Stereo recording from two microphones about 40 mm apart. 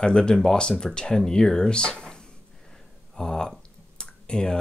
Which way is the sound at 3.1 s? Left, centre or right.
Centre.